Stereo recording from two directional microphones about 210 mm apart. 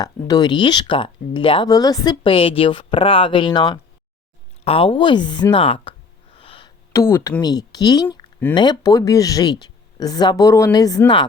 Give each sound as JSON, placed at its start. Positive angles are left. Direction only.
{"t": 0.0, "sound": "speech", "side_deg": 20}
{"t": 6.3, "sound": "a sound", "side_deg": 25}
{"t": 6.9, "sound": "speech", "side_deg": 15}